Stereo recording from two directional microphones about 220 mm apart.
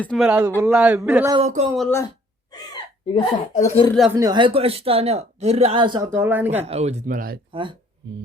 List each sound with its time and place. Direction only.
0.0 s speech: 5° left (ahead or behind)
0.3 s speech: 10° right (ahead or behind)
1.3 s speech: 30° right (ahead or behind)
2.5 s speech: 20° left (ahead or behind)
4.2 s speech: 20° right (ahead or behind)
6.7 s speech: 30° right (ahead or behind)
7.5 s speech: 20° right (ahead or behind)